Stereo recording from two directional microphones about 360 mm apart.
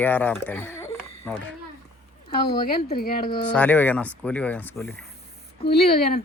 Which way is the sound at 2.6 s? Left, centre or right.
Left.